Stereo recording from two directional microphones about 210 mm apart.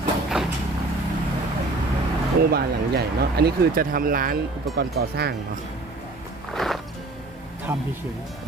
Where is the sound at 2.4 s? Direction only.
45° right (ahead or behind).